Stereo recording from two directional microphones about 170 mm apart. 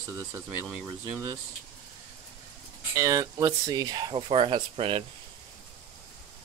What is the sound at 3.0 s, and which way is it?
Speech, 20° right (ahead or behind).